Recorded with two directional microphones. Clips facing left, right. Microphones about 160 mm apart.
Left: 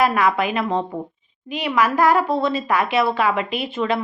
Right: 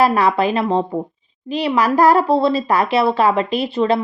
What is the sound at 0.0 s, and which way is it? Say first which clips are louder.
Speech: right 3 dB; 35° right (ahead or behind).